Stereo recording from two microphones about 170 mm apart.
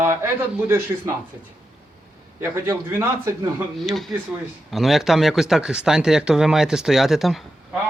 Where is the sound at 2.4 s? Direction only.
15° right (ahead or behind).